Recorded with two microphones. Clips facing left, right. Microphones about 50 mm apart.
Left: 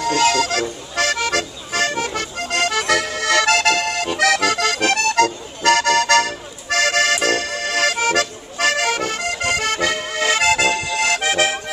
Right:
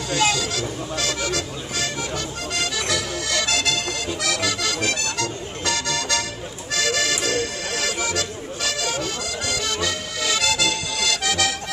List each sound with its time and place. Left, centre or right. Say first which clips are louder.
0.0 s music: left 5 dB; left